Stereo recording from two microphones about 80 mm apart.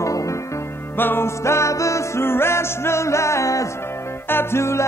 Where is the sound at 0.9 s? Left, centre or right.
Left.